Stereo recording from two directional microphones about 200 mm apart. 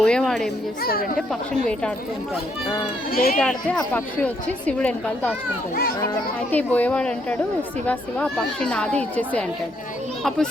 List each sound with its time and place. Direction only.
0.0 s a woman's voice: centre (ahead or behind)
0.8 s speech: 50° left (ahead or behind)
1.3 s a woman's voice: 5° left (ahead or behind)
3.1 s speech: 50° left (ahead or behind)
3.3 s a woman's voice: 5° left (ahead or behind)
6.5 s a woman's voice: 10° left (ahead or behind)